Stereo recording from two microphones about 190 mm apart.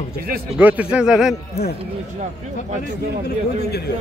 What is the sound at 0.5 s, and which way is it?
Speech, 5° right (ahead or behind).